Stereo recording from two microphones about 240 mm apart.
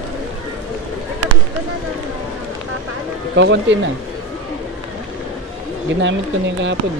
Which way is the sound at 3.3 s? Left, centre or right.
Right.